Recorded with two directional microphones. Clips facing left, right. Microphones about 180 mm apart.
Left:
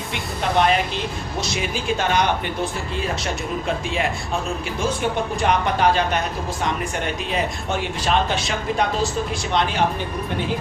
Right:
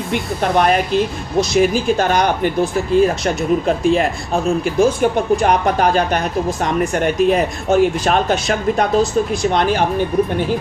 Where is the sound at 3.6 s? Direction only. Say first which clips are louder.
Right 6 dB; 40° right (ahead or behind).